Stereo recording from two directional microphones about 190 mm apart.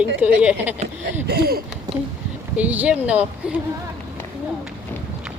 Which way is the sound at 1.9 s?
20° right (ahead or behind).